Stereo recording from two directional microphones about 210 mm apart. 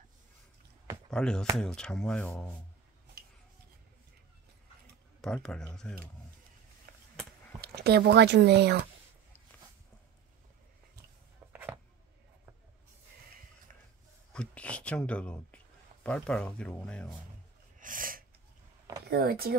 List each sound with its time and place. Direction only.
1.1 s speech: 5° left (ahead or behind)
5.2 s speech: 5° left (ahead or behind)
6.9 s a sound: 45° right (ahead or behind)
7.6 s speech: 50° right (ahead or behind)
14.3 s speech: 5° left (ahead or behind)
17.7 s sneeze: 40° right (ahead or behind)
19.0 s speech: 45° right (ahead or behind)